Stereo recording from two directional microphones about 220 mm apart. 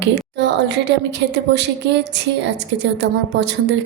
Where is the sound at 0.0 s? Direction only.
50° right (ahead or behind).